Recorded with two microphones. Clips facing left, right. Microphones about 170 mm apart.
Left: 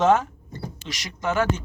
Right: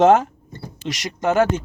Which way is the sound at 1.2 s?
50° right (ahead or behind).